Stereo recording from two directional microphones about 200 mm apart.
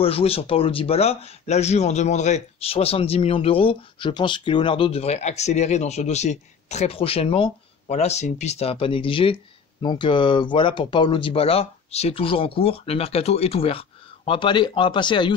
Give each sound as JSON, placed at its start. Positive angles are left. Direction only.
{"t": 0.0, "sound": "speech", "side_deg": 30}